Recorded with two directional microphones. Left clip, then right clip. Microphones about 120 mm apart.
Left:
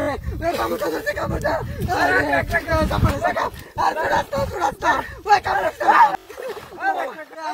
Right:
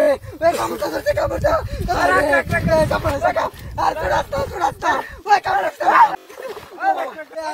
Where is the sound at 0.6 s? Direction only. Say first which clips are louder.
Right 1 dB; 25° right (ahead or behind).